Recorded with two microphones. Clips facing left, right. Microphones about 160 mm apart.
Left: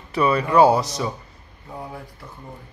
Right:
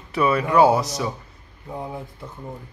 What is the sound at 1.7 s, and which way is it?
Speech, 20° right (ahead or behind).